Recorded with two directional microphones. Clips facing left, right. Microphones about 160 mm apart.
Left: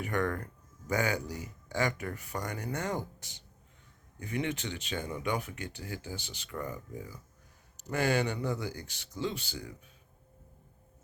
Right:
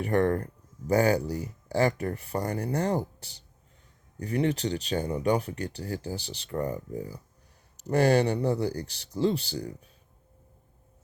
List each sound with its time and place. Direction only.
0.0 s speech: 30° right (ahead or behind)